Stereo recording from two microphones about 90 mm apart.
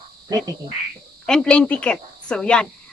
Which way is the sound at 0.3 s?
45° right (ahead or behind).